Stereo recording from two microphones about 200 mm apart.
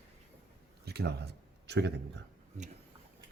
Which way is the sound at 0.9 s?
55° right (ahead or behind).